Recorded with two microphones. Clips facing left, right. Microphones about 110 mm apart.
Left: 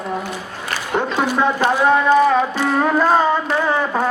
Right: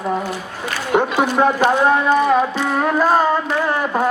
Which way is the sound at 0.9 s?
10° right (ahead or behind).